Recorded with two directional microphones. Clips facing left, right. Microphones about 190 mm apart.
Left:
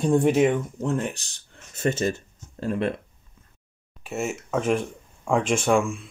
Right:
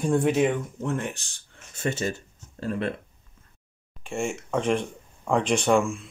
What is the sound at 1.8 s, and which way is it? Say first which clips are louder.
Speech: left 4 dB; 45° left (ahead or behind).